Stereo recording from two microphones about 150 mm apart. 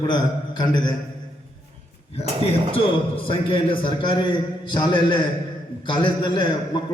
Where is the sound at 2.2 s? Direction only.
40° left (ahead or behind).